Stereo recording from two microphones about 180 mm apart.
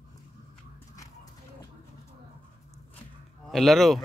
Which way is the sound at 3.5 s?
Centre (ahead or behind).